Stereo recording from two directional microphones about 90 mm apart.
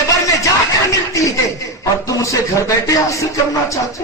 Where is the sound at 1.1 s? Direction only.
40° left (ahead or behind).